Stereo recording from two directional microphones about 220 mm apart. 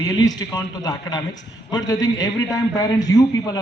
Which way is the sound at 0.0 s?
15° left (ahead or behind).